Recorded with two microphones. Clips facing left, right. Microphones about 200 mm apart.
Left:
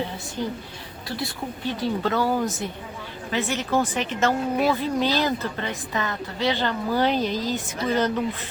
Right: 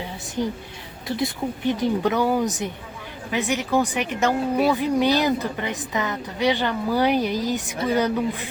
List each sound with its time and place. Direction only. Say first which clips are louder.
0.4 s a woman's voice: right 4 dB; 15° right (ahead or behind)